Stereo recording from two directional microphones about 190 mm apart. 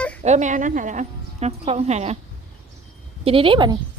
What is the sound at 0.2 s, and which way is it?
Speech, 40° right (ahead or behind).